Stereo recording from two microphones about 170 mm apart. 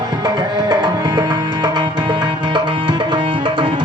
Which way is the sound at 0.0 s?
25° right (ahead or behind).